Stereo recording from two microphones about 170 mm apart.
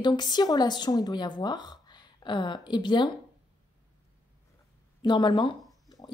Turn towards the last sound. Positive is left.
turn(degrees=20)  # may be behind; listen again after turning